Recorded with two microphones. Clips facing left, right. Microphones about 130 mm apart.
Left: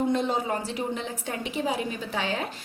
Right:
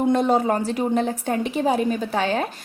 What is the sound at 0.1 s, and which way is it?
A woman's voice, 50° right (ahead or behind).